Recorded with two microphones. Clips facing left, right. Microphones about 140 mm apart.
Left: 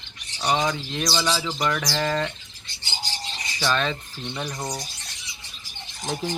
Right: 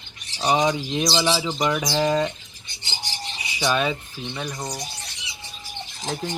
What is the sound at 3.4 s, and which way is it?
Rub, 10° right (ahead or behind).